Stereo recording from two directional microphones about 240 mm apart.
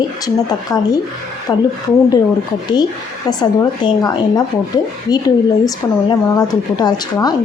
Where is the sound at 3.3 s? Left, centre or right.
Centre.